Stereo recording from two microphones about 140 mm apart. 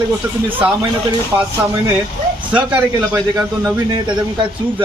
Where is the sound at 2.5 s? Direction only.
10° right (ahead or behind).